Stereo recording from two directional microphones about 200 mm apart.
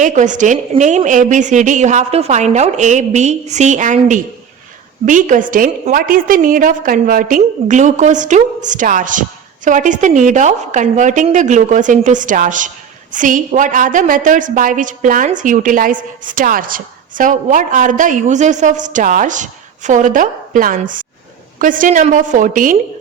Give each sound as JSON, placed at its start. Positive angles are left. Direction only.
{"t": 0.0, "sound": "a woman's voice", "side_deg": -40}